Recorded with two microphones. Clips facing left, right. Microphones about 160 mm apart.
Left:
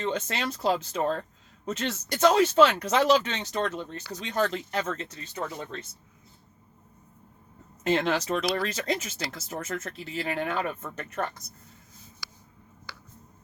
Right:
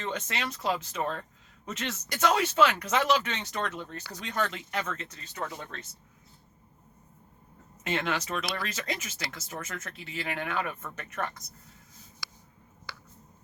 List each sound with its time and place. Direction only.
0.0 s speech: 30° left (ahead or behind)
7.9 s speech: 35° left (ahead or behind)